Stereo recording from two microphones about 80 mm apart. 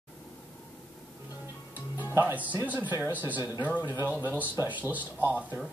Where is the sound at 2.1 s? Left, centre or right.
Right.